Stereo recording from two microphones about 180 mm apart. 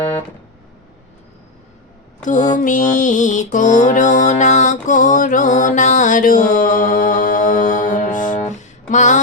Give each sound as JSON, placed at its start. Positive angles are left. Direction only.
{"t": 2.2, "sound": "mantra", "side_deg": 45}
{"t": 2.6, "sound": "music", "side_deg": 45}